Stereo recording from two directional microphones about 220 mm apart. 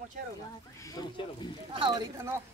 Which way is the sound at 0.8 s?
20° left (ahead or behind).